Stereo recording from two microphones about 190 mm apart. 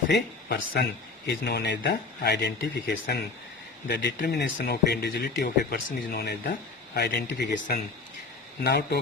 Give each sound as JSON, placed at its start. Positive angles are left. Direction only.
{"t": 0.1, "sound": "speech", "side_deg": 55}
{"t": 8.6, "sound": "speech", "side_deg": 55}